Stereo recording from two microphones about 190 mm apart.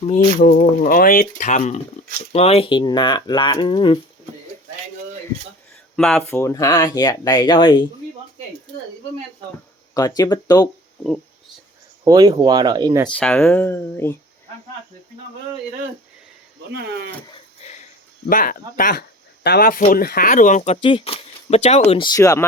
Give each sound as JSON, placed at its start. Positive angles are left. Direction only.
{"t": 0.1, "sound": "speech", "side_deg": 45}
{"t": 6.0, "sound": "speech", "side_deg": 5}
{"t": 9.9, "sound": "speech", "side_deg": 20}
{"t": 12.0, "sound": "speech", "side_deg": -20}
{"t": 13.1, "sound": "speech", "side_deg": 5}
{"t": 16.7, "sound": "speech", "side_deg": -55}
{"t": 18.3, "sound": "speech", "side_deg": 45}